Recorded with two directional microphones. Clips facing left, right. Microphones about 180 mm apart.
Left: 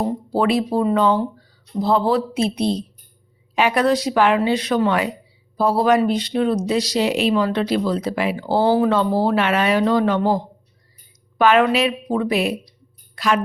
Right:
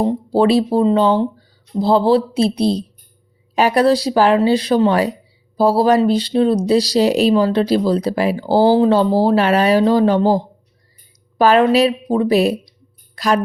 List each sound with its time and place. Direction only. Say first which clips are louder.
0.0 s speech: right 5 dB; 30° right (ahead or behind)